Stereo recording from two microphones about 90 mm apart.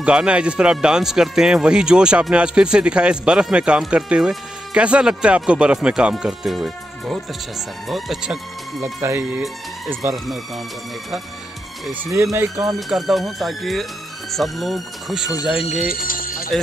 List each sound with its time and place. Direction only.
0.0 s speech: 10° right (ahead or behind)
8.8 s speech: 35° right (ahead or behind)
10.1 s speech: centre (ahead or behind)
12.2 s speech: 35° right (ahead or behind)
12.7 s speech: centre (ahead or behind)